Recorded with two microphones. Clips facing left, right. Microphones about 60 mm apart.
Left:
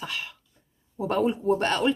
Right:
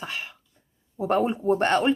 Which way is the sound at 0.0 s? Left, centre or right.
Right.